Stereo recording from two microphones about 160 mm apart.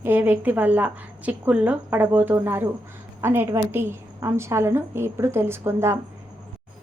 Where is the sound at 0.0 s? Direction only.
10° right (ahead or behind).